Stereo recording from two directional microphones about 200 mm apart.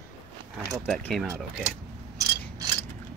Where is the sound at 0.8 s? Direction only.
5° left (ahead or behind).